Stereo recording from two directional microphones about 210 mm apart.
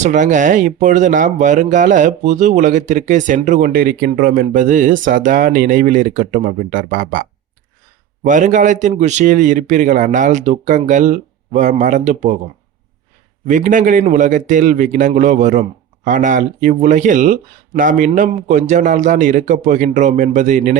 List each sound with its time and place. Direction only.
0.0 s speech: 35° right (ahead or behind)
13.5 s speech: 35° right (ahead or behind)